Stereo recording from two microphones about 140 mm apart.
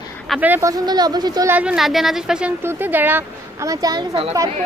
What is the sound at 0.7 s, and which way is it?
Speech, 25° right (ahead or behind).